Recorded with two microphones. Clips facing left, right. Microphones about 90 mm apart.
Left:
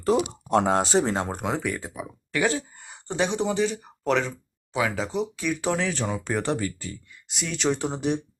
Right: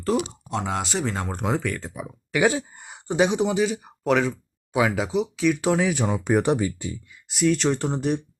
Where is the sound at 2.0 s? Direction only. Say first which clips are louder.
Right 4 dB; 15° right (ahead or behind).